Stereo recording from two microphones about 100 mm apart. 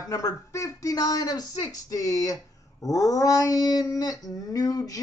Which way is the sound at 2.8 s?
35° left (ahead or behind).